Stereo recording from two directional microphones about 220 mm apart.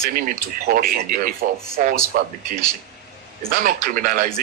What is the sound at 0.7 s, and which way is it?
Speech, 40° right (ahead or behind).